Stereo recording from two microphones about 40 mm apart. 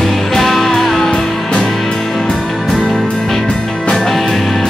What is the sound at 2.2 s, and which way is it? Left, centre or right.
Music, centre.